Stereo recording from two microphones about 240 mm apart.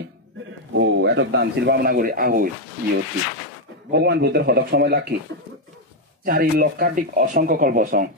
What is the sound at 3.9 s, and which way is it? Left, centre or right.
A man's voice, right.